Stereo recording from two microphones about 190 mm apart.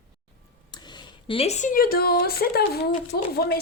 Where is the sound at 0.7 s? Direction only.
25° left (ahead or behind).